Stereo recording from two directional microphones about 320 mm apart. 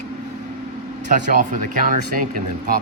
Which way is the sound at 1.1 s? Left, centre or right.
Right.